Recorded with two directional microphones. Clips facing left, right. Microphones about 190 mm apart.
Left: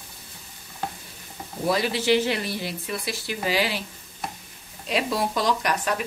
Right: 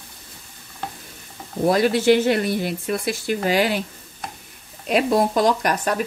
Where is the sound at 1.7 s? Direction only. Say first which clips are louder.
Right 6 dB; 50° right (ahead or behind).